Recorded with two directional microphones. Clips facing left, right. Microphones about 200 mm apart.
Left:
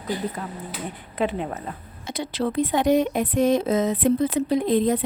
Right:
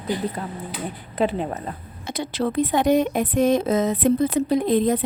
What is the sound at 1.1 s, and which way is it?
Speech, 35° right (ahead or behind).